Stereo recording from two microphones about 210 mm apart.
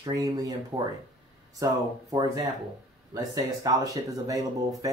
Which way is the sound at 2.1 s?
15° right (ahead or behind).